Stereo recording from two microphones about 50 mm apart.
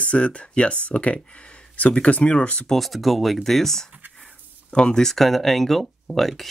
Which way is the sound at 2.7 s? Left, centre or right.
Centre.